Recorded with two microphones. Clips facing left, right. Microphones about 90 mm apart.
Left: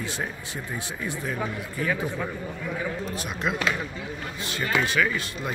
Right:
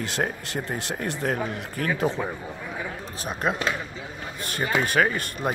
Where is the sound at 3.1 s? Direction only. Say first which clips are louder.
Right 2 dB; 35° right (ahead or behind).